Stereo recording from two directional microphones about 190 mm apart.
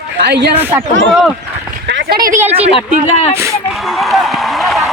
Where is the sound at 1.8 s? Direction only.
60° right (ahead or behind).